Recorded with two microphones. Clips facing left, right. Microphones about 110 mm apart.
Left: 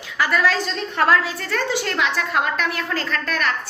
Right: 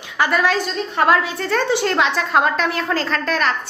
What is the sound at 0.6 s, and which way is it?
A woman's voice, 15° right (ahead or behind).